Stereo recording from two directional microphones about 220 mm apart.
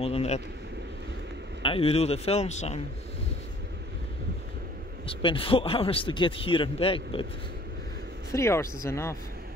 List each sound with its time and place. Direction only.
0.0 s speech: 25° left (ahead or behind)
1.6 s speech: 25° left (ahead or behind)
5.0 s speech: 25° left (ahead or behind)
8.3 s speech: 15° left (ahead or behind)